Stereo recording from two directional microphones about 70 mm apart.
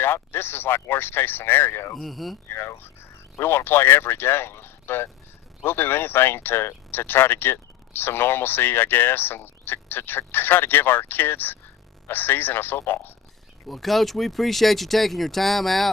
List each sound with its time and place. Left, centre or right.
0.0 s speech: left
2.0 s speech: centre
2.5 s speech: left
13.7 s speech: centre